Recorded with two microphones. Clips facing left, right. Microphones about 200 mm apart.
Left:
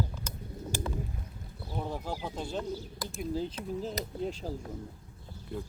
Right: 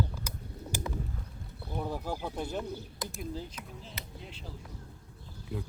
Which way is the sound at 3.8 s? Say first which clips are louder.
Left 12 dB; 40° left (ahead or behind).